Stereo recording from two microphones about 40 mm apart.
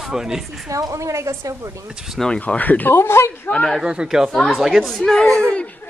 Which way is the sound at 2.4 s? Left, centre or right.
Left.